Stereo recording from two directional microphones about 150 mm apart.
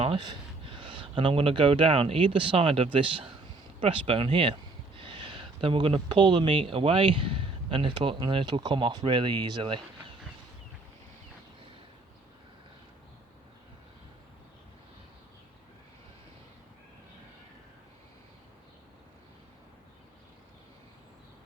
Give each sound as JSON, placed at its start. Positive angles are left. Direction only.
{"t": 0.0, "sound": "speech", "side_deg": -35}